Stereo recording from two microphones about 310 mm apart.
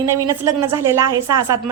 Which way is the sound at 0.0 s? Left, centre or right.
Centre.